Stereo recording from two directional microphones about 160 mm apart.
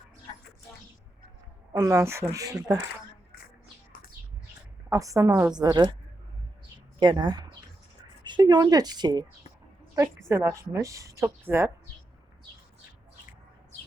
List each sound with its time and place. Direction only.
1.7 s speech: 20° right (ahead or behind)
4.9 s speech: 20° right (ahead or behind)
7.0 s speech: 30° right (ahead or behind)
10.2 s speech: 20° right (ahead or behind)